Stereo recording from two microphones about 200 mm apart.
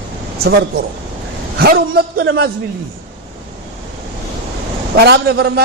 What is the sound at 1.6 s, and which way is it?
Speech, 50° right (ahead or behind).